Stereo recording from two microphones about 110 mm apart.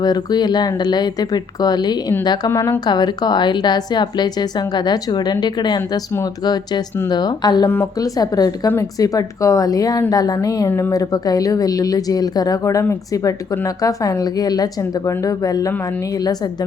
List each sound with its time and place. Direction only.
0.0 s a woman's voice: 40° left (ahead or behind)
2.5 s speech: 25° left (ahead or behind)
2.8 s a woman's voice: 40° left (ahead or behind)
10.7 s speech: 20° left (ahead or behind)
10.9 s a woman's voice: 35° left (ahead or behind)
13.8 s a woman's voice: 35° left (ahead or behind)